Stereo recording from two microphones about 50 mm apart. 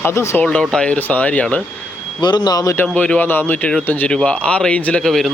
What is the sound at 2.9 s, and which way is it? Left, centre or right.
Speech, left.